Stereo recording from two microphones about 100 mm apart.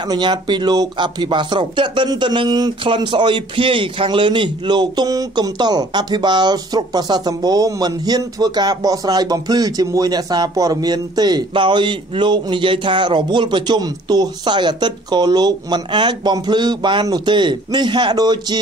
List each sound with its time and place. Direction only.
0.1 s speech: 50° right (ahead or behind)